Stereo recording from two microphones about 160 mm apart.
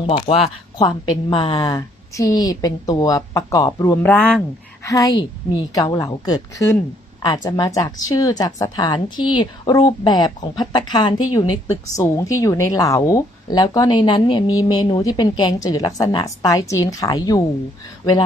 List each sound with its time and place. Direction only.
0.0 s a woman's voice: 35° left (ahead or behind)
4.0 s speech: 10° left (ahead or behind)
4.8 s a woman's voice: 20° left (ahead or behind)